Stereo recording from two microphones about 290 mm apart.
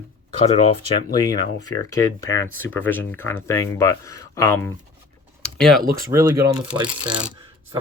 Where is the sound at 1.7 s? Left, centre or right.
Centre.